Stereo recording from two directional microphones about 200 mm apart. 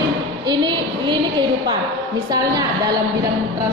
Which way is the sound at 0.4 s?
20° right (ahead or behind).